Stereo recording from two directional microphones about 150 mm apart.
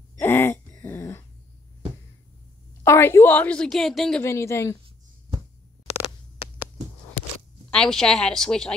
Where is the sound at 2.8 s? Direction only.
15° left (ahead or behind).